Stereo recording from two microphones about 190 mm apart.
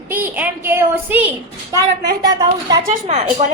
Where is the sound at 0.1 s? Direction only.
10° right (ahead or behind).